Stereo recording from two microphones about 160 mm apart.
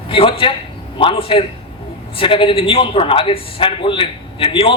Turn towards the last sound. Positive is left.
turn(degrees=30)  # may be behind; listen again after turning